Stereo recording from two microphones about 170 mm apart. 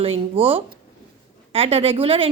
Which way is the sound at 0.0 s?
35° right (ahead or behind).